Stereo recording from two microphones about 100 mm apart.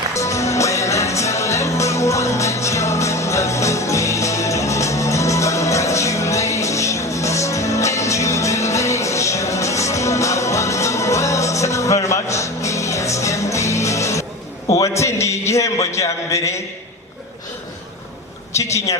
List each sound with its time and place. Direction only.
0.1 s music: 30° left (ahead or behind)
14.7 s a sound: 35° left (ahead or behind)
18.5 s a man's voice: 30° left (ahead or behind)